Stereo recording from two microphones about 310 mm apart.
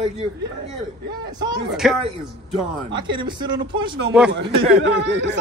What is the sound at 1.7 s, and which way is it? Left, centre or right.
Speech, centre.